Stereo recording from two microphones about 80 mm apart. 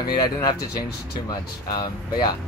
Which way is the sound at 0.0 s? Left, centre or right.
Left.